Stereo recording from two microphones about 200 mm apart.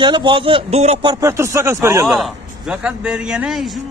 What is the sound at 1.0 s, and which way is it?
Speech, 15° right (ahead or behind).